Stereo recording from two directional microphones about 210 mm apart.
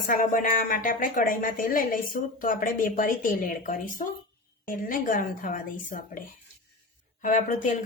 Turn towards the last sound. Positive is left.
turn(degrees=35)  # may be behind; listen again after turning